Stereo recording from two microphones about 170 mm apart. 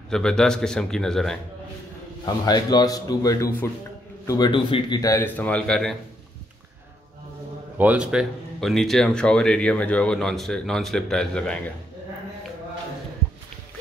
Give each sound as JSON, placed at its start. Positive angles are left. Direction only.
{"t": 0.1, "sound": "speech", "side_deg": 5}
{"t": 2.2, "sound": "speech", "side_deg": 25}
{"t": 5.1, "sound": "speech", "side_deg": 10}
{"t": 7.7, "sound": "speech", "side_deg": -10}